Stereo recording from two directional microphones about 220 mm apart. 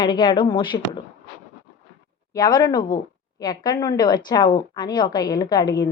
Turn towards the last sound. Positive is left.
turn(degrees=20)  # may be behind; listen again after turning